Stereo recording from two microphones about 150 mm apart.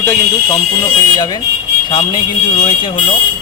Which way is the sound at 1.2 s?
25° left (ahead or behind).